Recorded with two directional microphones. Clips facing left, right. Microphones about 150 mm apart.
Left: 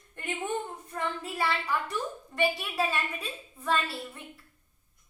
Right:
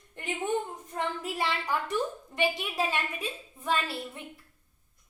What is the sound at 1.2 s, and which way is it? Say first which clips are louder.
A child's voice: even; 20° right (ahead or behind).